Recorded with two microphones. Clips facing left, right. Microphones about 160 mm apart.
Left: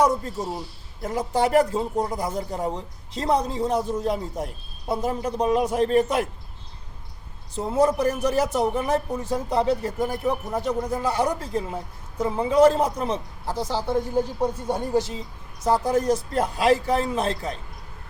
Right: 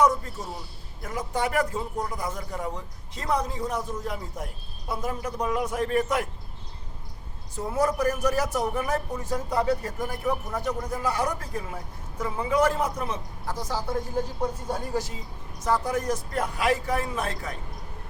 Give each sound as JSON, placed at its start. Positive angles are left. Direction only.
{"t": 0.0, "sound": "a man's voice", "side_deg": 35}
{"t": 7.5, "sound": "a man's voice", "side_deg": 25}